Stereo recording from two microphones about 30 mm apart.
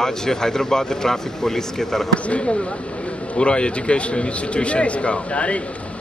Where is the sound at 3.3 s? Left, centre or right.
Left.